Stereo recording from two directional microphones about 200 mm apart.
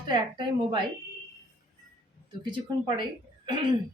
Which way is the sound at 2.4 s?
20° right (ahead or behind).